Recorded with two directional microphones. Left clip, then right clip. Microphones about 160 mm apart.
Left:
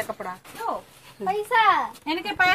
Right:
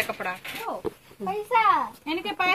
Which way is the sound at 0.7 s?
20° left (ahead or behind).